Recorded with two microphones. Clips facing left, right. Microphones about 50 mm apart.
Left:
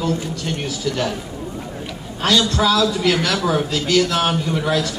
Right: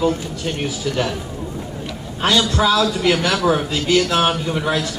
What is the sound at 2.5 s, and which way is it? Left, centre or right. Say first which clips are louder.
Speech: even; centre.